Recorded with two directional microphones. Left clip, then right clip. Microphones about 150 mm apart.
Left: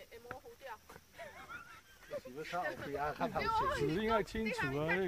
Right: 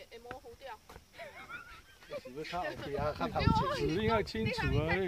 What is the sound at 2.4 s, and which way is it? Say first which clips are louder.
Speech: right 2 dB; 50° right (ahead or behind).